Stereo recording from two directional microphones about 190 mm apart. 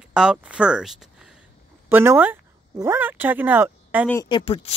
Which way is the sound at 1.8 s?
10° right (ahead or behind).